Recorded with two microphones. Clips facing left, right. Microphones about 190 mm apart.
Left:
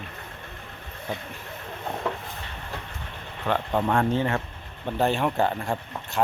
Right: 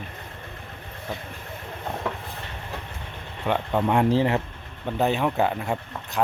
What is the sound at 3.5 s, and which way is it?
Speech, 15° right (ahead or behind).